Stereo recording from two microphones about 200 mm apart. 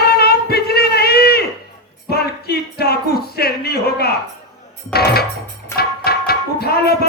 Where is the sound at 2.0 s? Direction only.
50° left (ahead or behind).